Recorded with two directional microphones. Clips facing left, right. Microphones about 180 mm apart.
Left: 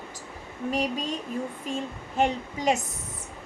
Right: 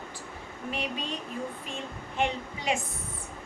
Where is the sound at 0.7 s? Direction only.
40° left (ahead or behind).